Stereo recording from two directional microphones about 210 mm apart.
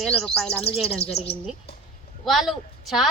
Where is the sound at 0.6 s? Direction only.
30° left (ahead or behind).